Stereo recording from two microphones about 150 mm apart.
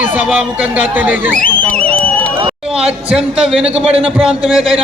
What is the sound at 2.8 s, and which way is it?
A man's voice, 5° right (ahead or behind).